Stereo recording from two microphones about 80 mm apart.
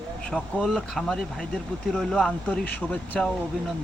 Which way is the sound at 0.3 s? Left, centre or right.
Centre.